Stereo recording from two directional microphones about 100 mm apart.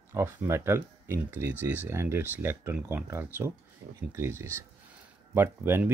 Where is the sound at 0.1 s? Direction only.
25° right (ahead or behind).